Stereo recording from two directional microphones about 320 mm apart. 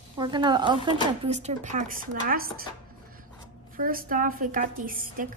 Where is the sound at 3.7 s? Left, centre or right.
Right.